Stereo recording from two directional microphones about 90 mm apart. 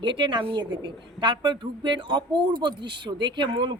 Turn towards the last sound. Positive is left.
turn(degrees=-60)  # may be behind; listen again after turning